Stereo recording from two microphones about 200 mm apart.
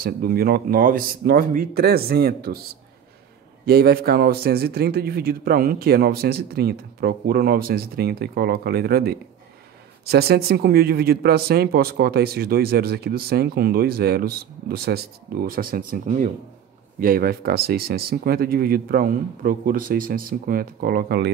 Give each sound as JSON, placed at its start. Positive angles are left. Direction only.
{"t": 0.0, "sound": "speech", "side_deg": -45}